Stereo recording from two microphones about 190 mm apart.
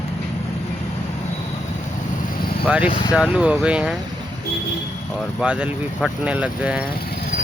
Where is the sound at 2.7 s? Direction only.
5° right (ahead or behind).